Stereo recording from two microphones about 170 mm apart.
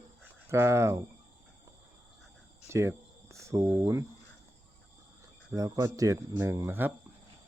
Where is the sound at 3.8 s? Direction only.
15° right (ahead or behind).